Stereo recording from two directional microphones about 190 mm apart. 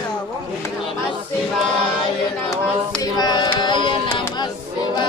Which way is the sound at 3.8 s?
25° left (ahead or behind).